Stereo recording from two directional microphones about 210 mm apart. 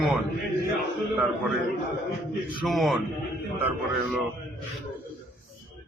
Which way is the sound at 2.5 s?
Centre (ahead or behind).